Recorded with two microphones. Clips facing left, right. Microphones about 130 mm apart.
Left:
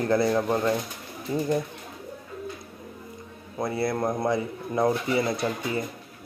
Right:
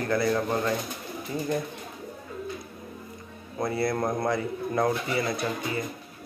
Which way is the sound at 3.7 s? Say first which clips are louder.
Even; 20° left (ahead or behind).